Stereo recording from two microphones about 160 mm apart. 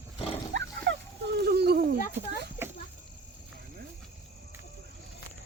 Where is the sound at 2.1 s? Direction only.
90° right.